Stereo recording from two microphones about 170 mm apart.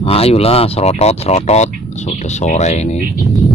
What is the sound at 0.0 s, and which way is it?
Speech, 35° left (ahead or behind).